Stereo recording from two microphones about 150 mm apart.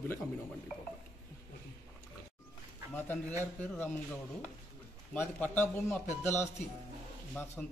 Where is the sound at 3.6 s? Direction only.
10° left (ahead or behind).